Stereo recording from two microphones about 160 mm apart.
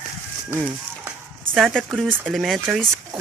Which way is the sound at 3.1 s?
35° right (ahead or behind).